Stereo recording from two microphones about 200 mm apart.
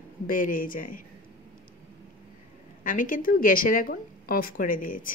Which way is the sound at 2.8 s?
40° left (ahead or behind).